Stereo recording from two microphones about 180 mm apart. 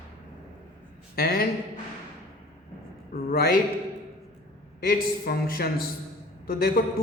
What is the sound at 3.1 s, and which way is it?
Speech, 55° left (ahead or behind).